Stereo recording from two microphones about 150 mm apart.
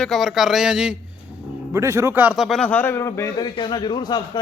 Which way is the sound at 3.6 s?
30° left (ahead or behind).